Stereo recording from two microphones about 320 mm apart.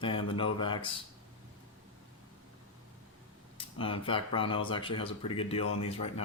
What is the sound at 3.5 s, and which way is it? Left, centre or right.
Speech, centre.